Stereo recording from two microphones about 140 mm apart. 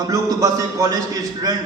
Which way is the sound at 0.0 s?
25° right (ahead or behind).